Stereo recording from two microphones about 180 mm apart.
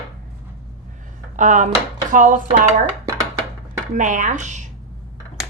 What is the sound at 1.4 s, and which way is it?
A woman's voice, 45° right (ahead or behind).